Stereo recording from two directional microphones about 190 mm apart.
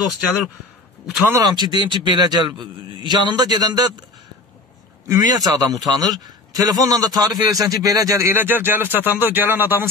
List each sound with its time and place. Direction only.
1.3 s a man's voice: 20° right (ahead or behind)
5.0 s a man's voice: 20° right (ahead or behind)